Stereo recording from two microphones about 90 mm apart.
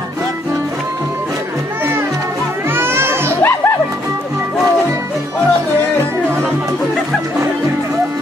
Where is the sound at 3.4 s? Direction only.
25° left (ahead or behind).